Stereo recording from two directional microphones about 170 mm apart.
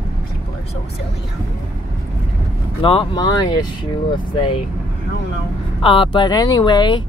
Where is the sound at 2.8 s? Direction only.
30° left (ahead or behind).